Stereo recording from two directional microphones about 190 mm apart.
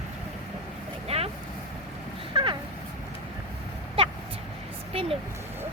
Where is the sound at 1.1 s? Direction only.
35° right (ahead or behind).